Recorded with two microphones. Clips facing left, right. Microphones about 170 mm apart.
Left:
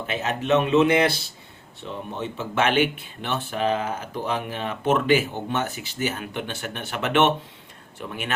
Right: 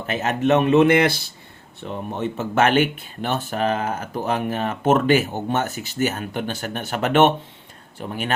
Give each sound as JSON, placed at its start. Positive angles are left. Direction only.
{"t": 0.1, "sound": "speech", "side_deg": -50}